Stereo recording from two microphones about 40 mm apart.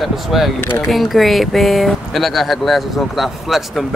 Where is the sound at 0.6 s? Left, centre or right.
Left.